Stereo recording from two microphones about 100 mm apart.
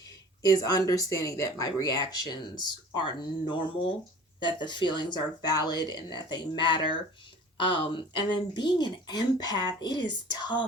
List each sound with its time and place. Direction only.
0.4 s speech: 40° left (ahead or behind)